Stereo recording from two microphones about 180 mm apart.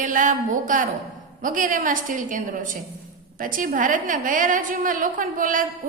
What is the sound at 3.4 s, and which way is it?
A woman's voice, 50° right (ahead or behind).